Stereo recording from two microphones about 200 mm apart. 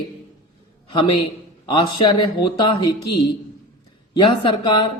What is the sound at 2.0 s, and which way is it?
Speech, 20° left (ahead or behind).